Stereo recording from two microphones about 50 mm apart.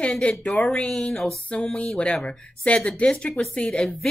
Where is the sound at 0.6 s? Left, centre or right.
Centre.